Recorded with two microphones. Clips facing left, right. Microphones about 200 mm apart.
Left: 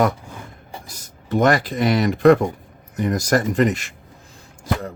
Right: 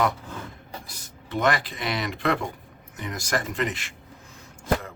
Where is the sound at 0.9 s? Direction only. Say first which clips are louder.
Left 11 dB; 40° left (ahead or behind).